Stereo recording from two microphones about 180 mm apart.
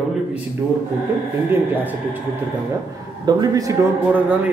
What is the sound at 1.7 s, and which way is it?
Speech, 10° right (ahead or behind).